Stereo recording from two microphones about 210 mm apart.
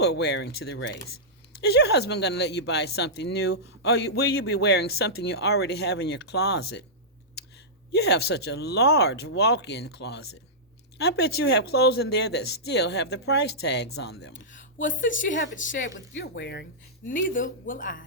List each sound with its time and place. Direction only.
0.0 s speech: 50° left (ahead or behind)
7.9 s a woman's voice: 50° left (ahead or behind)
15.5 s speech: 40° left (ahead or behind)
16.0 s speech: 55° left (ahead or behind)
17.1 s speech: 40° left (ahead or behind)